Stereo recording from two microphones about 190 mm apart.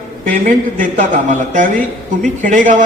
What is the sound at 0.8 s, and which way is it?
A man's voice, 45° right (ahead or behind).